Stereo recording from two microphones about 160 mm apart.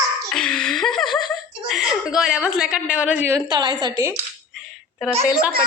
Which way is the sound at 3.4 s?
25° right (ahead or behind).